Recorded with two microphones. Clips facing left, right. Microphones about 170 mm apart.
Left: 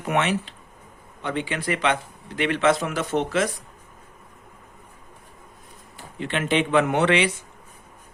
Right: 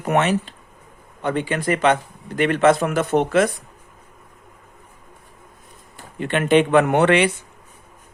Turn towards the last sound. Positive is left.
turn(degrees=-55)  # may be behind; listen again after turning